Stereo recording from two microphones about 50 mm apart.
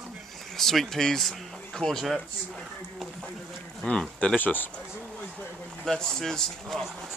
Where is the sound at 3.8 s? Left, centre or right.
Left.